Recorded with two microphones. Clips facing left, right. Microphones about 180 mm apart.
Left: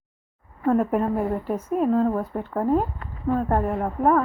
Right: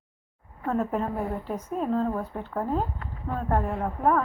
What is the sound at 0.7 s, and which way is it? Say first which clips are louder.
A woman's voice: left 6 dB; 10° left (ahead or behind).